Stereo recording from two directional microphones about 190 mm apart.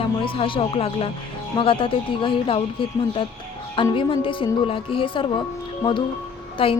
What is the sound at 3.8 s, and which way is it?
A woman's voice, 25° left (ahead or behind).